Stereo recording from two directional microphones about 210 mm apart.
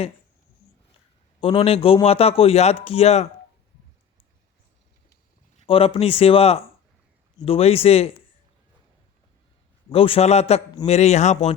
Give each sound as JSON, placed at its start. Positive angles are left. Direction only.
{"t": 1.4, "sound": "a man's voice", "side_deg": 25}
{"t": 5.6, "sound": "a man's voice", "side_deg": 25}
{"t": 9.9, "sound": "a man's voice", "side_deg": 25}